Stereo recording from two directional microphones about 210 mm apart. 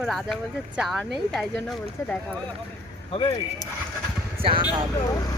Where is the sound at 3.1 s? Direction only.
25° left (ahead or behind).